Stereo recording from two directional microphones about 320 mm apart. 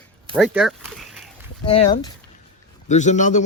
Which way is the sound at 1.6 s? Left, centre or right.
Centre.